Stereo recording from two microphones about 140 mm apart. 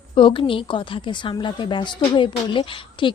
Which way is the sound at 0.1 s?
40° left (ahead or behind).